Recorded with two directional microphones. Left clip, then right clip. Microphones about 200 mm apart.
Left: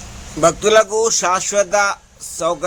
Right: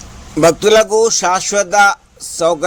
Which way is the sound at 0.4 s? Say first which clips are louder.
Right 3 dB; 20° right (ahead or behind).